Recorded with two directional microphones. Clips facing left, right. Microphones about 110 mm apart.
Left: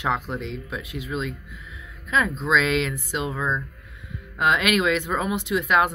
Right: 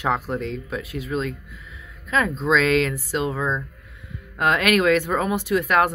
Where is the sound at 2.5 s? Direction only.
40° right (ahead or behind).